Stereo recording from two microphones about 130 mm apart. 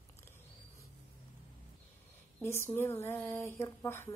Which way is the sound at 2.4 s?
20° left (ahead or behind).